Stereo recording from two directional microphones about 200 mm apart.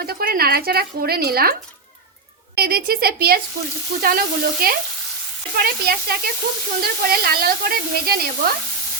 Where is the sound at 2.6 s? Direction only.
50° right (ahead or behind).